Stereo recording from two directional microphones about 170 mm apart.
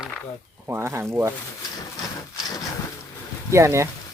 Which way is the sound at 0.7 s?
15° right (ahead or behind).